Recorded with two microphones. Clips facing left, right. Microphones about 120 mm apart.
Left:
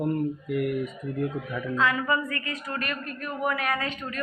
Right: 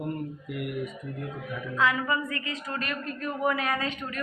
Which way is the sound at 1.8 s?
15° right (ahead or behind).